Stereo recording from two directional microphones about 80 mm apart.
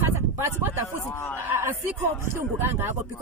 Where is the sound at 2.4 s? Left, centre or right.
Right.